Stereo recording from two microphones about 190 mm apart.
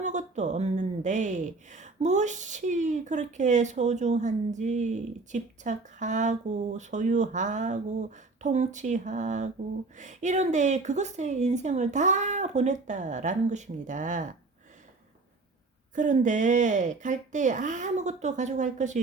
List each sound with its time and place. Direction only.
0.0 s speech: 40° right (ahead or behind)
16.0 s speech: 40° right (ahead or behind)